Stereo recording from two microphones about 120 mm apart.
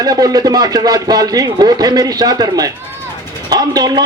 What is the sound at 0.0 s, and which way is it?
A man's voice, 30° right (ahead or behind).